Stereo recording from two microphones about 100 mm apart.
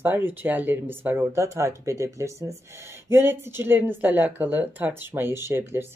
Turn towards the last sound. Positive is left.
turn(degrees=-25)  # may be behind; listen again after turning